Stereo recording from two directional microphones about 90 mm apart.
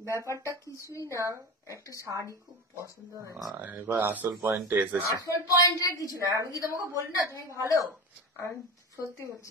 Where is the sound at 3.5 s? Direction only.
20° right (ahead or behind).